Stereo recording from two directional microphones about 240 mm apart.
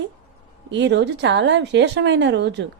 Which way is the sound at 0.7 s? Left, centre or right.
Right.